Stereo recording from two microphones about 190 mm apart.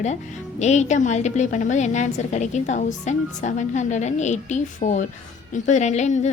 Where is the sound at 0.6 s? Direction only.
35° left (ahead or behind).